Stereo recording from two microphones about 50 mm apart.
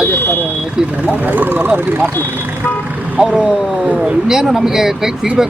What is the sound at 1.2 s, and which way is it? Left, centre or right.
Speech, right.